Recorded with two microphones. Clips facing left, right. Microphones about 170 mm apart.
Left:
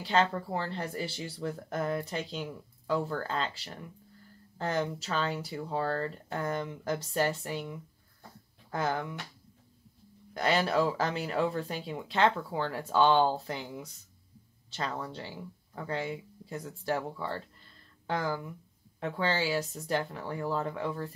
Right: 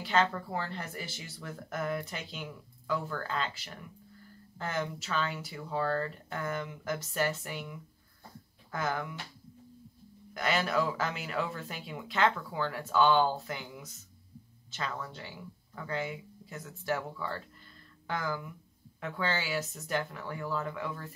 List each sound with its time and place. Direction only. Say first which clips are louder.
0.0 s speech: left 1 dB; 30° left (ahead or behind)
10.3 s speech: left 3 dB; 30° left (ahead or behind)